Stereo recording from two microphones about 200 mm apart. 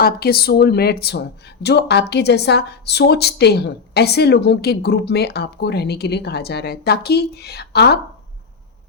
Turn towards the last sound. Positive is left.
turn(degrees=55)  # may be behind; listen again after turning